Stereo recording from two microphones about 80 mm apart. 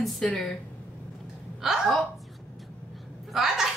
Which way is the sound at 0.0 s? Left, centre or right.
Centre.